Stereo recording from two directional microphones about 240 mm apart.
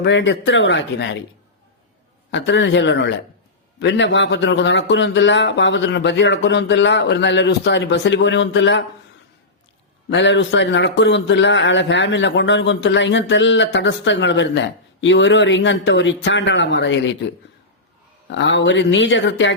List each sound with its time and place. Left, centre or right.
0.0 s a man's voice: left
2.3 s a man's voice: left
10.1 s a man's voice: left
18.3 s a man's voice: left